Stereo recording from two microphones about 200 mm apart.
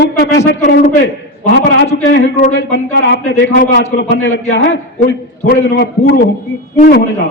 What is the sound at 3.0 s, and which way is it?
Speech, 55° left (ahead or behind).